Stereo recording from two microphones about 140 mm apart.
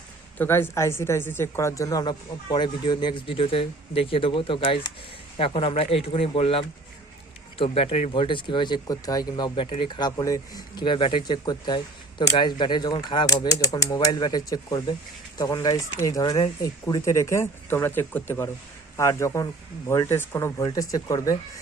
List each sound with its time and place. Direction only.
0.3 s a woman's voice: 15° left (ahead or behind); by 8.1 s 50° left (ahead or behind)
8.1 s a woman's voice: 35° left (ahead or behind)